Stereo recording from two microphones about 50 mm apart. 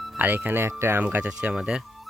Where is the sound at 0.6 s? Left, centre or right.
Right.